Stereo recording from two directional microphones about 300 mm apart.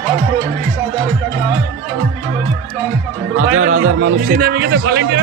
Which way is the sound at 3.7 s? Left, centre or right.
Right.